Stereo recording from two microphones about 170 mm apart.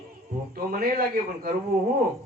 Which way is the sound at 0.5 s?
55° right (ahead or behind).